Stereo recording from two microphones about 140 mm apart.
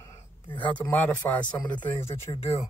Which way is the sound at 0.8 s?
15° left (ahead or behind).